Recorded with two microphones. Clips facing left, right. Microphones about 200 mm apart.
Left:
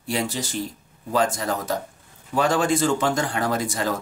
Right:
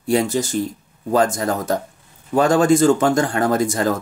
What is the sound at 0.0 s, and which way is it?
Speech, 45° right (ahead or behind).